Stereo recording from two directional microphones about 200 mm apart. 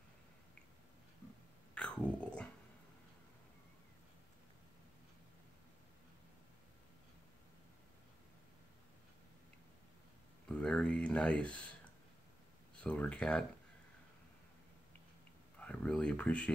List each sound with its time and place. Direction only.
1.8 s whispering: 5° left (ahead or behind)
10.5 s a sound: 5° left (ahead or behind)
12.8 s speech: 5° left (ahead or behind)
15.6 s speech: 5° left (ahead or behind)